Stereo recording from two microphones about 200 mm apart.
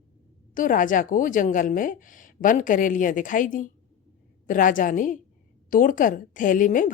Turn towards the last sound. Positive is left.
turn(degrees=40)  # may be behind; listen again after turning